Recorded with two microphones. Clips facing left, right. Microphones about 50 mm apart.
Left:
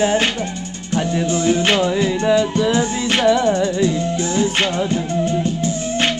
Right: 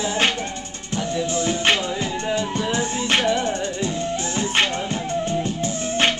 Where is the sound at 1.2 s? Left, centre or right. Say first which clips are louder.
Left 6 dB; right.